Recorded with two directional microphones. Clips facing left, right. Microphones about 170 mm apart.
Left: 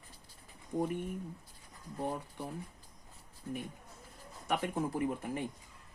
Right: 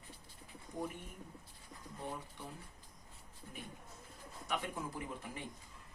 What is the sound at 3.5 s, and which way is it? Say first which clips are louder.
Speech: left 12 dB; 45° left (ahead or behind).